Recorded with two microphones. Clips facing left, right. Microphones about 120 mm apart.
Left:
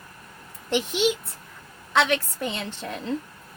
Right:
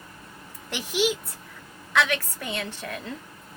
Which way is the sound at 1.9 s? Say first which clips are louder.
Left 3 dB; 25° left (ahead or behind).